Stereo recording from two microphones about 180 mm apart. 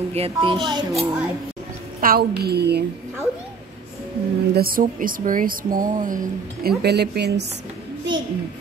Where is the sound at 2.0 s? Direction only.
55° right (ahead or behind).